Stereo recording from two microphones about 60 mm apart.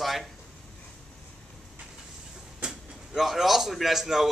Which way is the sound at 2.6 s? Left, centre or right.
Centre.